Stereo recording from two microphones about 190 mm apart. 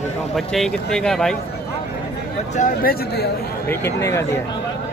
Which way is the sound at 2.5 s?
50° left (ahead or behind).